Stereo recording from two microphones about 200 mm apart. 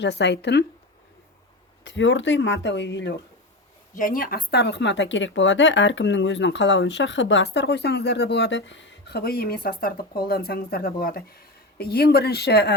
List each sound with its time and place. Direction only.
0.0 s speech: 60° left (ahead or behind)
1.8 s speech: 65° left (ahead or behind)
3.9 s speech: 45° left (ahead or behind)